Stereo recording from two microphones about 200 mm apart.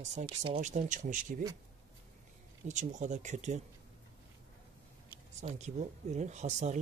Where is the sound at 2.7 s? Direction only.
35° right (ahead or behind).